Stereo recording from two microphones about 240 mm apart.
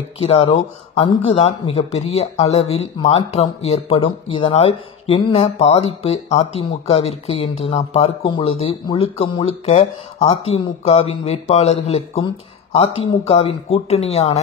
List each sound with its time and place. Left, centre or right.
0.2 s speech: left